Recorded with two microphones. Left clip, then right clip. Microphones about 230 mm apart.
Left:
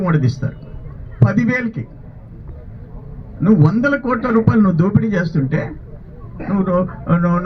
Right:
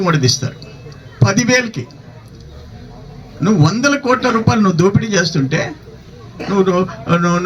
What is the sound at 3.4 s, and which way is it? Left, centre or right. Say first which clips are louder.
A man's voice: right 1 dB; right.